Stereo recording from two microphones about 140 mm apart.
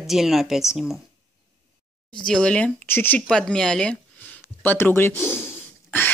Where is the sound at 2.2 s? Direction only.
10° left (ahead or behind).